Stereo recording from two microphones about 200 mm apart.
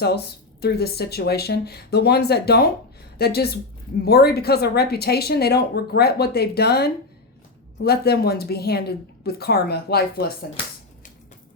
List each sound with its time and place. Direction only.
0.0 s speech: 55° left (ahead or behind)